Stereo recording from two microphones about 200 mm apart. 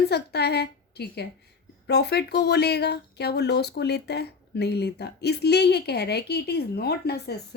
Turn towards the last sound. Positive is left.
turn(degrees=55)  # may be behind; listen again after turning